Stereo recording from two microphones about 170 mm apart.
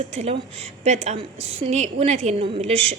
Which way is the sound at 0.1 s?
40° right (ahead or behind).